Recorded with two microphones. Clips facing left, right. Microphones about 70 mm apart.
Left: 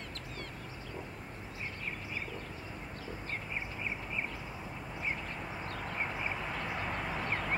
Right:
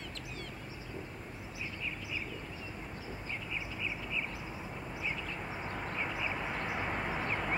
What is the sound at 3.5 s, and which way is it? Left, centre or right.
Duck, left.